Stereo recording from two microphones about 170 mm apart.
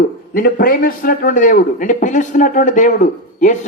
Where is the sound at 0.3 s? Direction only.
55° left (ahead or behind).